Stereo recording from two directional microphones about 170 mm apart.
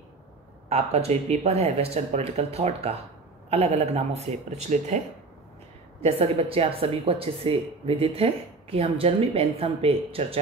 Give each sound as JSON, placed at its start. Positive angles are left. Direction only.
{"t": 0.7, "sound": "speech", "side_deg": -40}